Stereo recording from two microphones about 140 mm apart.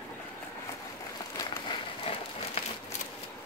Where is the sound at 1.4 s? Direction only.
35° left (ahead or behind).